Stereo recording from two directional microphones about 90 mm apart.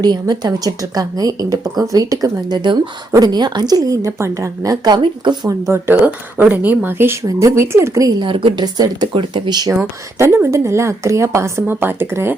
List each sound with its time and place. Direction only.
0.0 s speech: 50° right (ahead or behind)
5.2 s speech: 55° right (ahead or behind)
5.5 s a woman's voice: 30° right (ahead or behind)
8.2 s a woman's voice: 75° right (ahead or behind)
8.6 s speech: 50° right (ahead or behind)
10.2 s a woman's voice: 30° right (ahead or behind)